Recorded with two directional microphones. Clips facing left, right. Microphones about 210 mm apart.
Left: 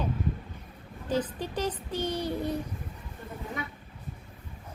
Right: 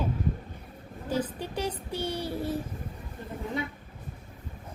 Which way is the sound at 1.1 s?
10° right (ahead or behind).